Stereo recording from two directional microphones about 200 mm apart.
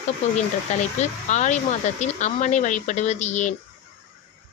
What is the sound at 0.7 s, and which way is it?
Speech, 35° left (ahead or behind).